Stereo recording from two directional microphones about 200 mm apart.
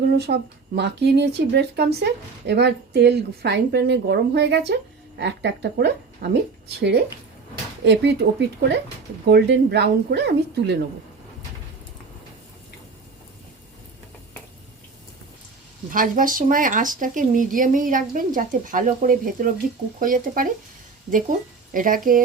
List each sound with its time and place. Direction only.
0.1 s speech: 55° right (ahead or behind)
15.9 s speech: 40° right (ahead or behind)